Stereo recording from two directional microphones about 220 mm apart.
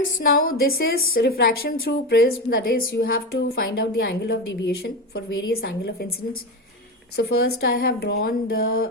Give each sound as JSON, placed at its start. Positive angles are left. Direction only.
{"t": 0.2, "sound": "a woman's voice", "side_deg": 40}
{"t": 7.2, "sound": "a woman's voice", "side_deg": 45}